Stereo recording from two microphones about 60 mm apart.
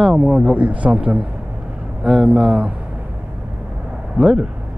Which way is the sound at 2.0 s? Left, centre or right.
Centre.